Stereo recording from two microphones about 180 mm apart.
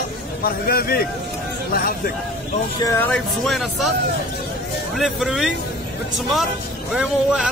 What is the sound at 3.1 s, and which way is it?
Speech, centre (ahead or behind).